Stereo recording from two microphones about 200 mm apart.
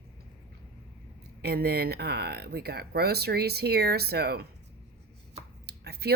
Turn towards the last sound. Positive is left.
turn(degrees=-50)  # may be behind; listen again after turning